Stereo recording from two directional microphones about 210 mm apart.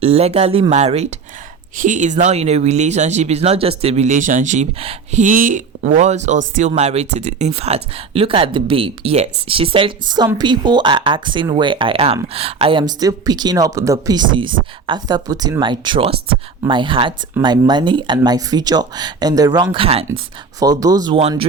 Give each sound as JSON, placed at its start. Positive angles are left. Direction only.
{"t": 0.0, "sound": "speech", "side_deg": -30}
{"t": 20.6, "sound": "speech", "side_deg": -15}